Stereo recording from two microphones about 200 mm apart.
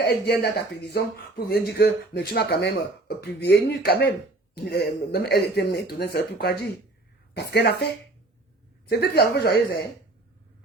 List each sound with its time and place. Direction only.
0.0 s speech: 55° left (ahead or behind)
7.3 s a woman's voice: 55° left (ahead or behind)
8.9 s speech: 55° left (ahead or behind)